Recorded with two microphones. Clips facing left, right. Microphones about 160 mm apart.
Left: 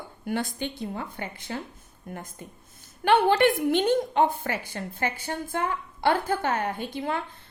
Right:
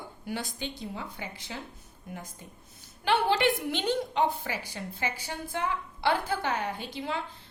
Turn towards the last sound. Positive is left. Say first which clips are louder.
# left 4 dB
turn(degrees=50)  # may be behind; listen again after turning